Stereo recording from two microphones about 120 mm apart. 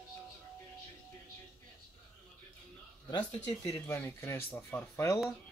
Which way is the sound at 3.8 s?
20° left (ahead or behind).